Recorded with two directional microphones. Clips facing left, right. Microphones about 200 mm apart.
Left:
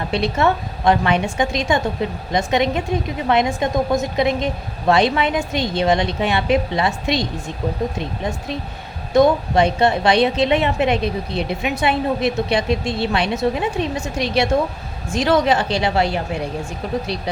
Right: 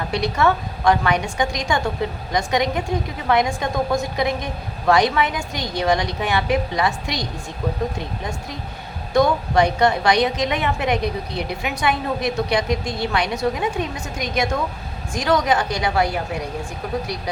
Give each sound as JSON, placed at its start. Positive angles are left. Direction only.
{"t": 0.1, "sound": "a woman's voice", "side_deg": 25}
{"t": 9.1, "sound": "a woman's voice", "side_deg": 20}